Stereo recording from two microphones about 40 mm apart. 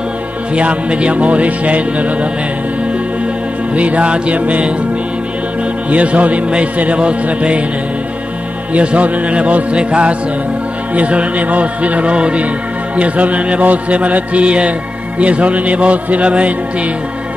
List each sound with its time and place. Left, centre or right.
0.6 s music: right
3.7 s music: right
5.9 s music: right
8.7 s music: right